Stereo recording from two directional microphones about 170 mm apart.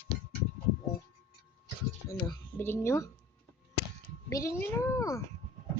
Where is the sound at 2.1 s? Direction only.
15° left (ahead or behind).